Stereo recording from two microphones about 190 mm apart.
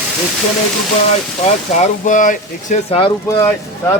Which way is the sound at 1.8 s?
40° left (ahead or behind).